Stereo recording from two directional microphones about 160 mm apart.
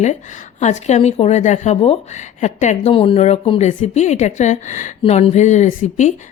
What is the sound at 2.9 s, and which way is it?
Speech, 35° left (ahead or behind).